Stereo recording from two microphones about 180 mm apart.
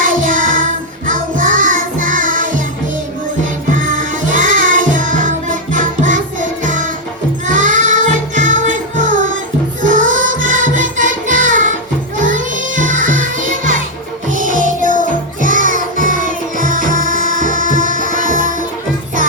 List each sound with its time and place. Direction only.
0.0 s music: 45° right (ahead or behind)
3.7 s music: 45° right (ahead or behind)